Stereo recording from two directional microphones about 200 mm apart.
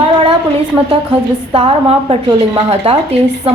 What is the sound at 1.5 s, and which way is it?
A woman's voice, 30° right (ahead or behind).